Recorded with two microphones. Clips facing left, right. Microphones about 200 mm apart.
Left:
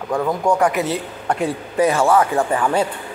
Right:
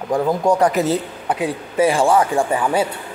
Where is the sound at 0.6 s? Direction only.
40° right (ahead or behind).